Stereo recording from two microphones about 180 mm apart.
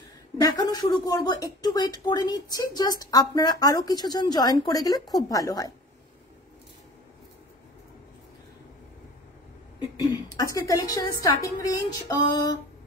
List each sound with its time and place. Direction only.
0.4 s speech: 20° left (ahead or behind)
10.3 s speech: 20° left (ahead or behind)